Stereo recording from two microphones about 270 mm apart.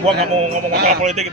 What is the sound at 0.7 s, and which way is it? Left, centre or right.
Speech, right.